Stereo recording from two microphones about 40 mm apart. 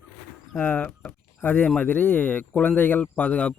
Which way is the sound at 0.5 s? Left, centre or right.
Left.